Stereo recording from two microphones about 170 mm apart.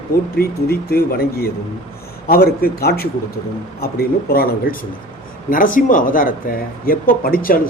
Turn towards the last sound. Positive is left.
turn(degrees=60)  # may be behind; listen again after turning